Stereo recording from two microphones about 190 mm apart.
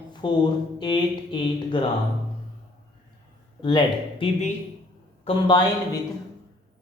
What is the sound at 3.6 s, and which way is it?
Speech, 25° left (ahead or behind).